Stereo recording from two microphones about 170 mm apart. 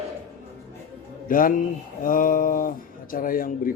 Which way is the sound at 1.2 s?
55° left (ahead or behind).